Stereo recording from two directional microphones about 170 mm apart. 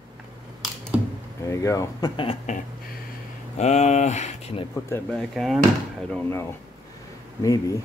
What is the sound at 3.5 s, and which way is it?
Speech, 40° left (ahead or behind).